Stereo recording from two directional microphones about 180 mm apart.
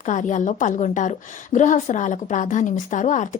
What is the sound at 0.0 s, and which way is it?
A woman's voice, 45° left (ahead or behind).